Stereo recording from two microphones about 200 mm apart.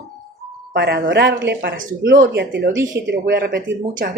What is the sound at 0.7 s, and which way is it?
A woman's voice, 55° right (ahead or behind).